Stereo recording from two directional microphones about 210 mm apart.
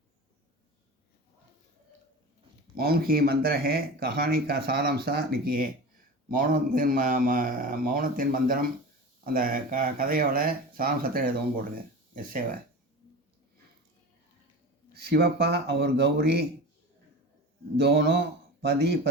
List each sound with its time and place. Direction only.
2.7 s speech: 45° right (ahead or behind)
14.9 s speech: 50° right (ahead or behind)
17.7 s a man's voice: 50° right (ahead or behind)